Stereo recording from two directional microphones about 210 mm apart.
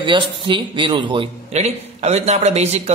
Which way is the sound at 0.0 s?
25° right (ahead or behind).